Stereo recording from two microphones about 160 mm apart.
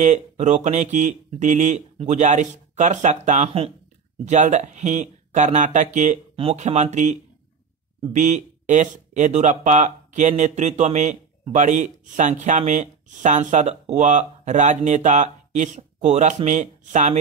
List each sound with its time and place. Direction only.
0.0 s speech: 45° right (ahead or behind)